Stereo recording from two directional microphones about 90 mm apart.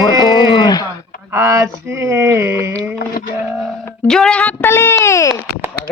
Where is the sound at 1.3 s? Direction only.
30° right (ahead or behind).